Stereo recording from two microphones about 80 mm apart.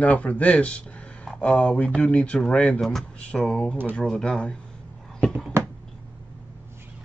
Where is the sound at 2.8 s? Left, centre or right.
Centre.